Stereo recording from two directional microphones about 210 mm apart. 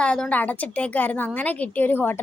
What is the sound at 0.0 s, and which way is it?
Speech, 5° left (ahead or behind).